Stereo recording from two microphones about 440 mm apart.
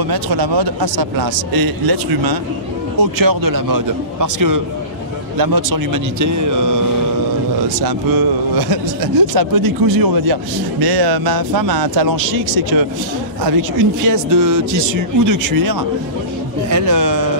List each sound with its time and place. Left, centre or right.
0.1 s a man's voice: right
7.8 s a man's voice: right
13.5 s a man's voice: right